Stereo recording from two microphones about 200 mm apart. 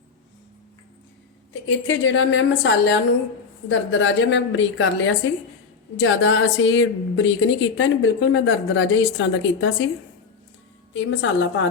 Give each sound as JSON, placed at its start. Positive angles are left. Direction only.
{"t": 1.6, "sound": "a woman's voice", "side_deg": 75}
{"t": 10.9, "sound": "a woman's voice", "side_deg": 65}